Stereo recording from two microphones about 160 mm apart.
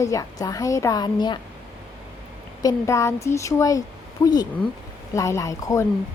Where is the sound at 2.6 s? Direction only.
20° left (ahead or behind).